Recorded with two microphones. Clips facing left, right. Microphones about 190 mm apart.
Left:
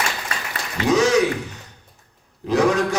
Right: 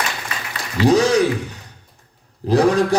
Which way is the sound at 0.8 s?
35° right (ahead or behind).